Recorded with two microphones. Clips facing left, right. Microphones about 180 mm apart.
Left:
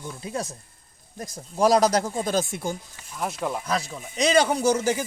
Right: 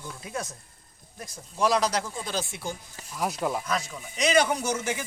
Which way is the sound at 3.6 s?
35° left (ahead or behind).